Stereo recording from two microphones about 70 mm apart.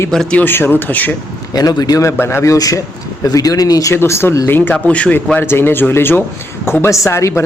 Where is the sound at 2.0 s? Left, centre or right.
Left.